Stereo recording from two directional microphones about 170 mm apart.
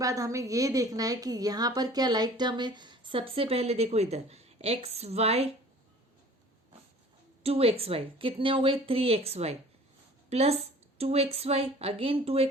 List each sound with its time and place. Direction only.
0.0 s a woman's voice: 20° right (ahead or behind); by 5.5 s 35° right (ahead or behind)
7.4 s a woman's voice: 35° right (ahead or behind)